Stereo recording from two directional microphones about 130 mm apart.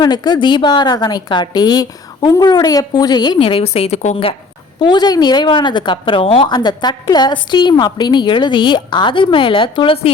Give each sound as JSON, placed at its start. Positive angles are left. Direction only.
{"t": 0.0, "sound": "a woman's voice", "side_deg": 35}
{"t": 3.3, "sound": "a woman's voice", "side_deg": 45}
{"t": 4.8, "sound": "a woman's voice", "side_deg": 35}